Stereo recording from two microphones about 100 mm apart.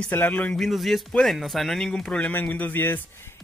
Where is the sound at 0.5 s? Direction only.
Centre (ahead or behind).